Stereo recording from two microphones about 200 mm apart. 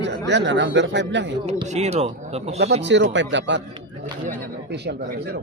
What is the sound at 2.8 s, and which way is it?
Speech, 60° right (ahead or behind).